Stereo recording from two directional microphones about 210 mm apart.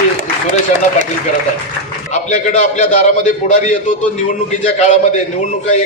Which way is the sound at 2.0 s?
35° left (ahead or behind).